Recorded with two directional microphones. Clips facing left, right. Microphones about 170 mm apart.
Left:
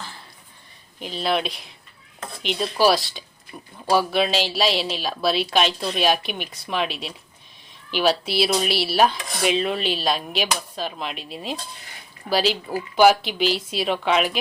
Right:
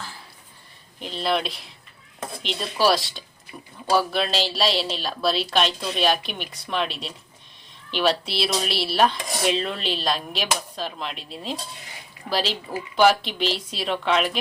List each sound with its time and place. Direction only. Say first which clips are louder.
0.9 s dishes: left 1 dB; centre (ahead or behind)